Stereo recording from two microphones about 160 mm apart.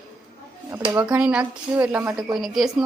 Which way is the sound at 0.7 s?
10° right (ahead or behind).